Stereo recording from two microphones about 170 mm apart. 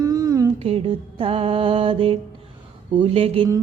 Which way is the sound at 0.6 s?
35° right (ahead or behind).